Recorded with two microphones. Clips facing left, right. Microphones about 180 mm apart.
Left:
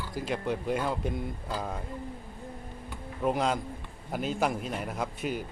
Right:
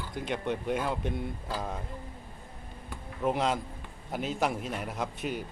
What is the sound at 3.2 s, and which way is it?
Speech, centre (ahead or behind).